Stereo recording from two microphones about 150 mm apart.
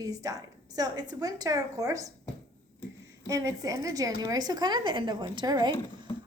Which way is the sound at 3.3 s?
20° right (ahead or behind).